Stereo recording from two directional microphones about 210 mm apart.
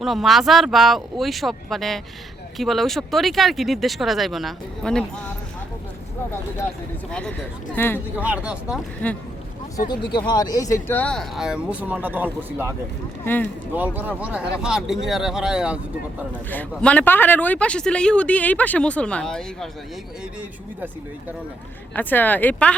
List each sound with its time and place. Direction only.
0.0 s speech: centre (ahead or behind)
7.1 s speech: 5° left (ahead or behind)
8.1 s speech: 5° right (ahead or behind)
8.7 s speech: 5° left (ahead or behind)
9.9 s speech: 20° left (ahead or behind); by 12.7 s 10° right (ahead or behind)
13.2 s speech: 10° left (ahead or behind)
13.7 s speech: 10° right (ahead or behind)
16.3 s speech: 5° left (ahead or behind)
21.9 s speech: 10° left (ahead or behind)